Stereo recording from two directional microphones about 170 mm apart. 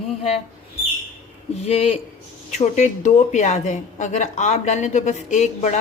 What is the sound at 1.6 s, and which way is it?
A woman's voice, 40° left (ahead or behind).